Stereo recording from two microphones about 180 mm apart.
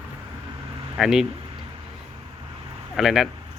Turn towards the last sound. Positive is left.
turn(degrees=0)  # may be behind; listen again after turning